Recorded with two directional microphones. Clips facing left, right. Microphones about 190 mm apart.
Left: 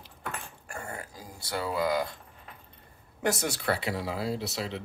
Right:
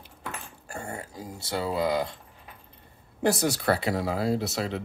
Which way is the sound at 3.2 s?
35° right (ahead or behind).